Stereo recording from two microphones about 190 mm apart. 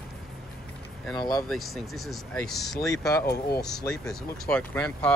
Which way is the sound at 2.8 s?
15° left (ahead or behind).